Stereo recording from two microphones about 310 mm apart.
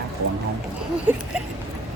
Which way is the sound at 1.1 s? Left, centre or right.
Centre.